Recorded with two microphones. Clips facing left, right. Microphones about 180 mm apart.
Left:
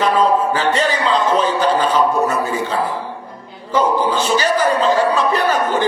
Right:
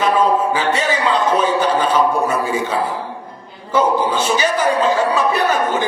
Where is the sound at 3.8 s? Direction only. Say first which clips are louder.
Even; 10° right (ahead or behind).